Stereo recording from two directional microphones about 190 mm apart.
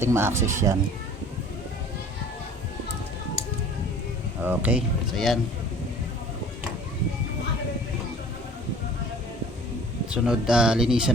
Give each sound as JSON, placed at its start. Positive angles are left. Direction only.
{"t": 0.0, "sound": "speech", "side_deg": -15}
{"t": 4.4, "sound": "speech", "side_deg": -5}
{"t": 10.2, "sound": "speech", "side_deg": -5}